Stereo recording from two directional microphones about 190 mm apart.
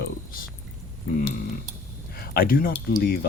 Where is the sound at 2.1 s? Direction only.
50° left (ahead or behind).